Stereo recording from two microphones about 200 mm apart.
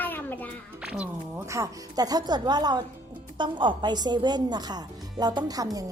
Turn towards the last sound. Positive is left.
turn(degrees=-15)  # may be behind; listen again after turning